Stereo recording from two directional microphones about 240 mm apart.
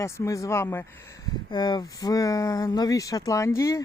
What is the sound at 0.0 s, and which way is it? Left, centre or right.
Speech, centre.